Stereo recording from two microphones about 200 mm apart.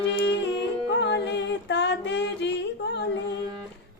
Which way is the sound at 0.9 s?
60° left (ahead or behind).